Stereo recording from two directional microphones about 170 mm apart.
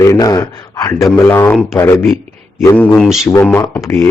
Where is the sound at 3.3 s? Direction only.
15° left (ahead or behind).